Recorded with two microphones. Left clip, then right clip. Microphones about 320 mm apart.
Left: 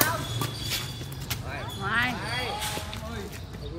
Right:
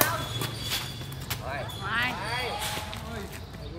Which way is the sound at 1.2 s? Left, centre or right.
Centre.